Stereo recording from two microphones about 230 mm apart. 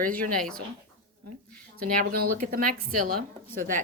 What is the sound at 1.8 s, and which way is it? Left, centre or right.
Speech, right.